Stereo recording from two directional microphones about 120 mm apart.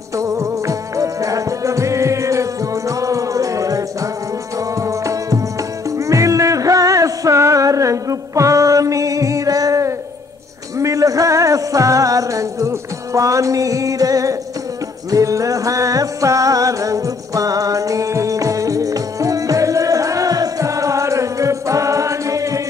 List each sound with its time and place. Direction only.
0.2 s music: 25° right (ahead or behind)